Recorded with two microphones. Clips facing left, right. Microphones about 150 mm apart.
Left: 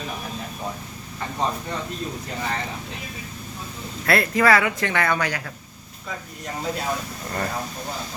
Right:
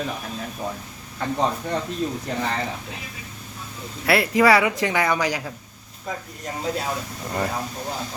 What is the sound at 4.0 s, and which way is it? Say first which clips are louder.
Speech: right 2 dB; 10° right (ahead or behind).